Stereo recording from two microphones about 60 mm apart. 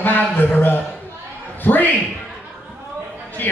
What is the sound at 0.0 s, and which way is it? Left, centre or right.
Speech, left.